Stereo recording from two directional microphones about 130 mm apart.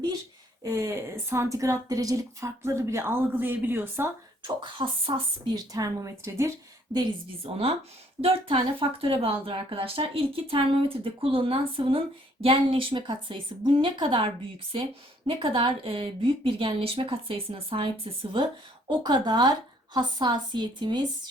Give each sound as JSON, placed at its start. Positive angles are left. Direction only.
{"t": 0.6, "sound": "a woman's voice", "side_deg": -20}
{"t": 4.4, "sound": "a woman's voice", "side_deg": -40}
{"t": 5.5, "sound": "a woman's voice", "side_deg": -25}
{"t": 6.9, "sound": "a woman's voice", "side_deg": -5}
{"t": 7.4, "sound": "speech", "side_deg": -50}
{"t": 15.3, "sound": "speech", "side_deg": -40}
{"t": 18.9, "sound": "a woman's voice", "side_deg": -30}